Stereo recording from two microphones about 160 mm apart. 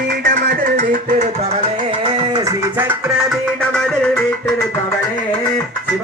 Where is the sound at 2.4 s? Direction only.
15° right (ahead or behind).